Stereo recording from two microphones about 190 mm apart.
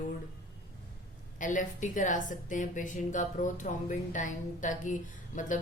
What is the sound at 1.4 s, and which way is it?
A woman's voice, 45° left (ahead or behind).